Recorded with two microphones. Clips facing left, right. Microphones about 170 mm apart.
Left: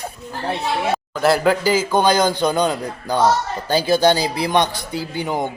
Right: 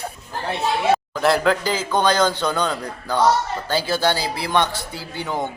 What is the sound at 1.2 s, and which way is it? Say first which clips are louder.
A man's voice: left 6 dB; 5° left (ahead or behind).